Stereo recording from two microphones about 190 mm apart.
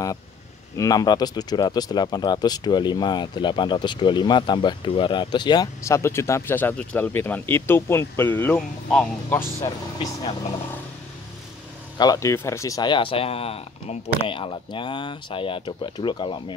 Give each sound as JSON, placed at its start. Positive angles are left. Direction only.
{"t": 0.7, "sound": "speech", "side_deg": 20}
{"t": 12.0, "sound": "speech", "side_deg": 15}